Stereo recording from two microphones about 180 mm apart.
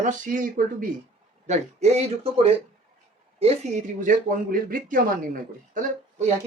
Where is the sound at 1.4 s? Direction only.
35° right (ahead or behind).